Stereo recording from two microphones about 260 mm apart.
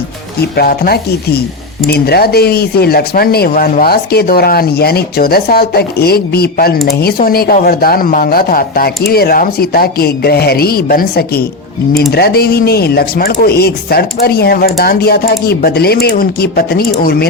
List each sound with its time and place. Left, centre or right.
0.5 s speech: left